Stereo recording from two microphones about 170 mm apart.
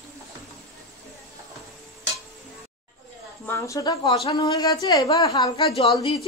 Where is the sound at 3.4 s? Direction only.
15° left (ahead or behind).